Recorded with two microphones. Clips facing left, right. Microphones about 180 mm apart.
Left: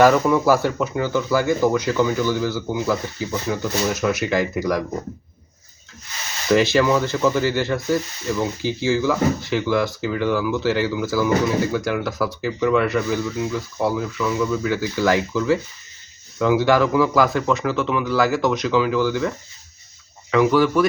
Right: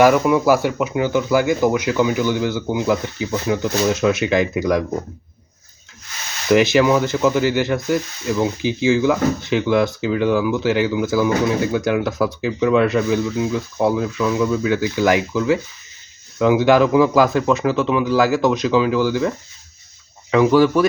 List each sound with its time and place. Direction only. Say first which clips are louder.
0.0 s speech: right 1 dB; 10° right (ahead or behind)
6.5 s speech: right 3 dB; 15° right (ahead or behind)
20.3 s speech: right 3 dB; 20° right (ahead or behind)